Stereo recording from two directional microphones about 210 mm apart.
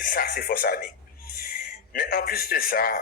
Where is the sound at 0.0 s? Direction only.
45° left (ahead or behind).